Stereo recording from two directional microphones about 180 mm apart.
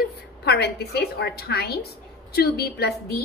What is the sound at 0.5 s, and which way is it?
A woman's voice, 65° left (ahead or behind).